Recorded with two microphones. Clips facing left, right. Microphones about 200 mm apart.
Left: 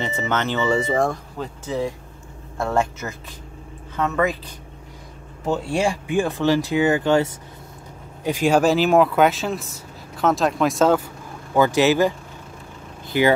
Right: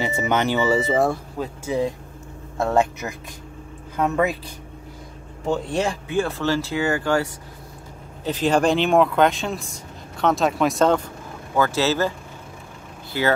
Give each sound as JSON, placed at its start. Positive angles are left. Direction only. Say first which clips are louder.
{"t": 0.0, "sound": "speech", "louder": "right 2 dB", "side_deg": -10}
{"t": 5.5, "sound": "speech", "louder": "left 1 dB", "side_deg": 10}
{"t": 8.2, "sound": "speech", "louder": "left 2 dB", "side_deg": 10}
{"t": 11.5, "sound": "speech", "louder": "left 4 dB", "side_deg": 15}
{"t": 13.1, "sound": "speech", "louder": "left 4 dB", "side_deg": 15}